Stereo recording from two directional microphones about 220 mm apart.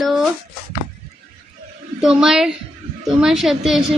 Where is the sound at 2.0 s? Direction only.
Centre (ahead or behind).